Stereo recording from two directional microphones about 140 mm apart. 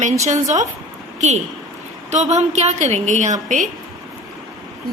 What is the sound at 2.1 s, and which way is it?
A woman's voice, 55° right (ahead or behind).